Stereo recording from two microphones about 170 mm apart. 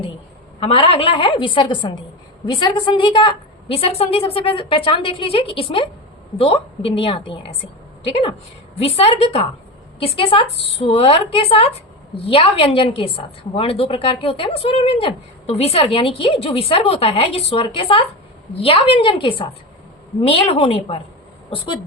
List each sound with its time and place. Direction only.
0.6 s a woman's voice: 35° left (ahead or behind)
8.8 s a woman's voice: 35° left (ahead or behind)